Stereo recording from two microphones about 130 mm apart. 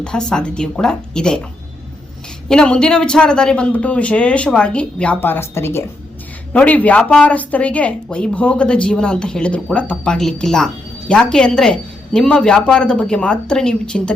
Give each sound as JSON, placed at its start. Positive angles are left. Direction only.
{"t": 0.0, "sound": "a woman's voice", "side_deg": 5}
{"t": 2.5, "sound": "speech", "side_deg": 5}